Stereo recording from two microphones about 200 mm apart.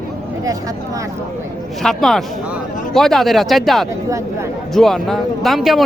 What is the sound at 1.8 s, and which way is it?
Speech, centre (ahead or behind).